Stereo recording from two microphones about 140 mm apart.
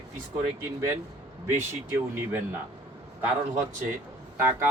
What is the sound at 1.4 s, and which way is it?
Speech, 15° right (ahead or behind).